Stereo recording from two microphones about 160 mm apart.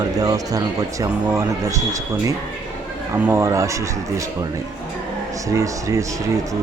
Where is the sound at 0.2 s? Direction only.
20° right (ahead or behind).